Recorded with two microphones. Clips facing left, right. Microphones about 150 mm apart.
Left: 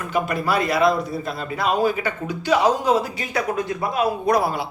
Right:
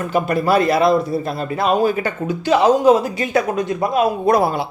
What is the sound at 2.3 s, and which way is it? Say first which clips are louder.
Speech: right 4 dB; 25° right (ahead or behind).